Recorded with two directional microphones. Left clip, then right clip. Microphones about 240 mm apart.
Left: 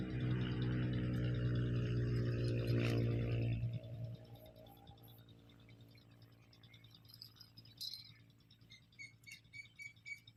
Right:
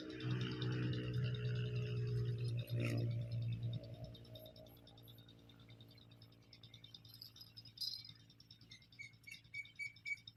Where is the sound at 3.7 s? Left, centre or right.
Centre.